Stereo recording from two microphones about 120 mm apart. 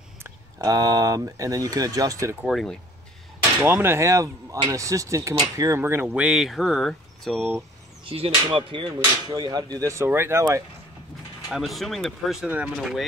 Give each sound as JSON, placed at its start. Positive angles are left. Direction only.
{"t": 0.2, "sound": "speech", "side_deg": -30}
{"t": 2.4, "sound": "speech", "side_deg": 0}
{"t": 3.6, "sound": "speech", "side_deg": -20}
{"t": 8.0, "sound": "speech", "side_deg": -50}
{"t": 11.4, "sound": "speech", "side_deg": 0}